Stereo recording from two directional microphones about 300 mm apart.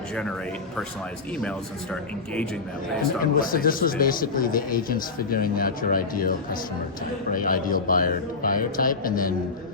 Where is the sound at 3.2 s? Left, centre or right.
Left.